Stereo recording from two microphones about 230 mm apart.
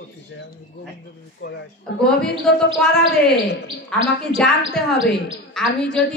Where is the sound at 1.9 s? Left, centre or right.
Left.